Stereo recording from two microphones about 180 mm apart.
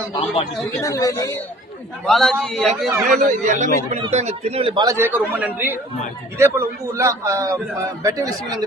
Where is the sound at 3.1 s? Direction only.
45° right (ahead or behind).